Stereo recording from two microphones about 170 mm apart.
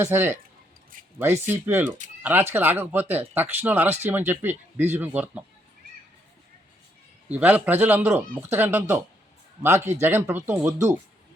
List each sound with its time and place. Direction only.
0.0 s speech: 15° right (ahead or behind)
0.9 s a sound: 55° right (ahead or behind)
1.5 s speech: 15° right (ahead or behind)
7.3 s speech: 10° right (ahead or behind)